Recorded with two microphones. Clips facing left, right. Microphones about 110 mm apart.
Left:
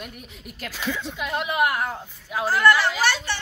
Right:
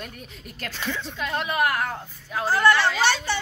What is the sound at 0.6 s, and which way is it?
A woman's voice, 5° left (ahead or behind).